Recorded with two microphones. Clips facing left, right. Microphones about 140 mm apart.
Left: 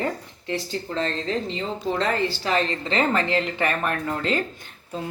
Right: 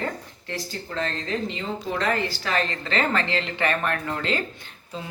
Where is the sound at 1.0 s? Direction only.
30° left (ahead or behind).